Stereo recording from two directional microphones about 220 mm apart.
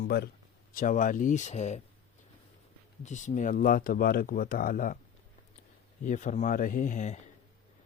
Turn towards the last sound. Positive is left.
turn(degrees=35)  # may be behind; listen again after turning